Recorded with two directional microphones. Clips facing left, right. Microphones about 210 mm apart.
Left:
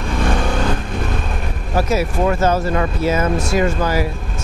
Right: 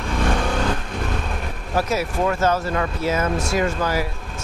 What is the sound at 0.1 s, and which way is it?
Vehicle, 15° left (ahead or behind).